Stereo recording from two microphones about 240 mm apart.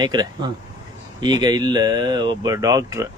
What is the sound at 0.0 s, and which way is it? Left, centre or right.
Speech, centre.